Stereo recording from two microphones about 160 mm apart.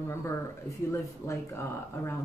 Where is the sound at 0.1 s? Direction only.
15° left (ahead or behind).